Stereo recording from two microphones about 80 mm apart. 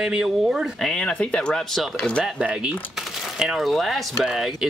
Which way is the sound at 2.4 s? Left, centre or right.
Centre.